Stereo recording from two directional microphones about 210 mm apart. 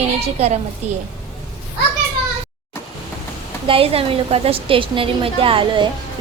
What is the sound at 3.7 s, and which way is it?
A woman's voice, 25° right (ahead or behind).